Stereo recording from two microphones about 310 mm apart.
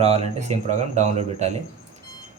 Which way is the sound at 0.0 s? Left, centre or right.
Right.